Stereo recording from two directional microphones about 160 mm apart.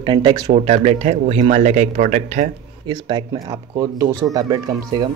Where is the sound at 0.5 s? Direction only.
40° right (ahead or behind).